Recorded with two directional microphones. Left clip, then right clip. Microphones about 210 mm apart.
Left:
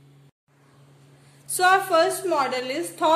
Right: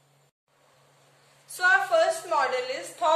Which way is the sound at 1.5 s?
50° left (ahead or behind).